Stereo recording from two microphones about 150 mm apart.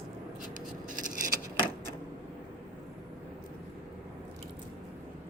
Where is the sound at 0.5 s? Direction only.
60° right (ahead or behind).